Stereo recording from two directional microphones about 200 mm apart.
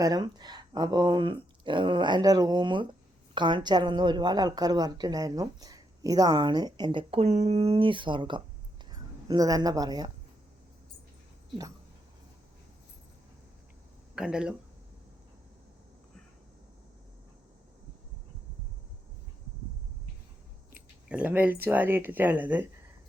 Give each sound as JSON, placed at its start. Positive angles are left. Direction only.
{"t": 0.0, "sound": "a woman's voice", "side_deg": -20}
{"t": 14.2, "sound": "speech", "side_deg": -5}
{"t": 21.1, "sound": "speech", "side_deg": -5}